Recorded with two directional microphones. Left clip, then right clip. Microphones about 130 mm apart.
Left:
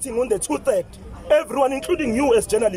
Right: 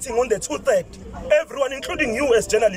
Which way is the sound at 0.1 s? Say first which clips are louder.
Right 1 dB; 35° left (ahead or behind).